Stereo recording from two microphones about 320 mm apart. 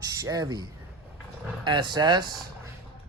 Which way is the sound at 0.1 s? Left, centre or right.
Centre.